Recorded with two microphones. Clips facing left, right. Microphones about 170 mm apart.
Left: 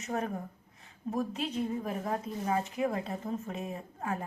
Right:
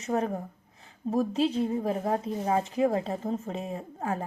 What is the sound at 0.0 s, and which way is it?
A woman's voice, 35° right (ahead or behind).